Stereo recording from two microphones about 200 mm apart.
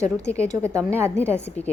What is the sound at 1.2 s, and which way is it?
Speech, 5° left (ahead or behind).